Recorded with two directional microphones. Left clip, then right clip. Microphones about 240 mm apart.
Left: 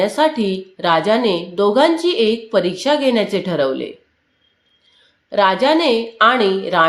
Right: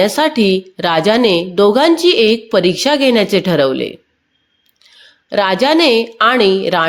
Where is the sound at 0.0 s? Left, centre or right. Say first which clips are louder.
Right 3 dB; right.